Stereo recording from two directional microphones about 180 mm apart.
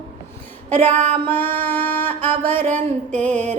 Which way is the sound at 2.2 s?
10° left (ahead or behind).